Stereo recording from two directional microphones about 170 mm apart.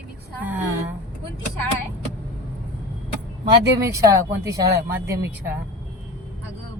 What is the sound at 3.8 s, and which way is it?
Speech, 20° right (ahead or behind).